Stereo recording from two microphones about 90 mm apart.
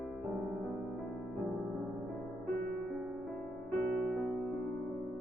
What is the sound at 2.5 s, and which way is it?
Music, 5° left (ahead or behind).